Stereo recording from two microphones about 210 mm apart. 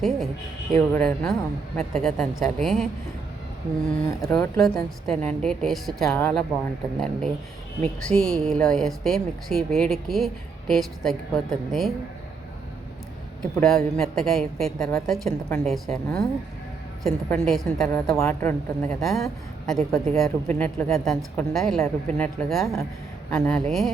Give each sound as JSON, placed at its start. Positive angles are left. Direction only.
{"t": 0.7, "sound": "a man's voice", "side_deg": 5}
{"t": 3.8, "sound": "a man's voice", "side_deg": 5}
{"t": 7.8, "sound": "a man's voice", "side_deg": 5}
{"t": 13.4, "sound": "a man's voice", "side_deg": 0}